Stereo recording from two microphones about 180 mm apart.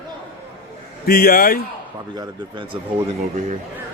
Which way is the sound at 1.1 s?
55° left (ahead or behind).